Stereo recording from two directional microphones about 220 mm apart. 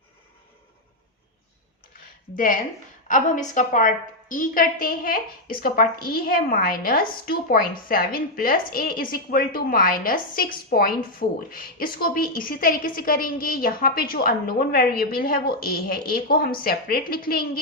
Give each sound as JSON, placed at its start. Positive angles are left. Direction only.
{"t": 2.3, "sound": "a woman's voice", "side_deg": 40}